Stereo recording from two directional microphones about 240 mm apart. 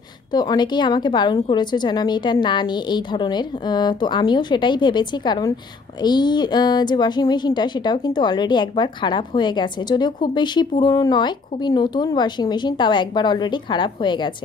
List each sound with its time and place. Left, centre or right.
0.3 s a woman's voice: centre